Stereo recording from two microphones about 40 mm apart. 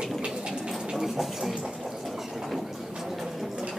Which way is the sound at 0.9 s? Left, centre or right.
Centre.